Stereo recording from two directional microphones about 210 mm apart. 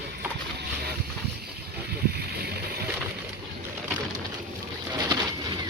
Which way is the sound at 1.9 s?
50° right (ahead or behind).